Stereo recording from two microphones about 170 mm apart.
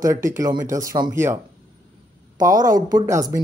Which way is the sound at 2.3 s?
20° right (ahead or behind).